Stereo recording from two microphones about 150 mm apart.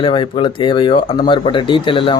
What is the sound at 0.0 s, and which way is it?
Speech, 35° left (ahead or behind).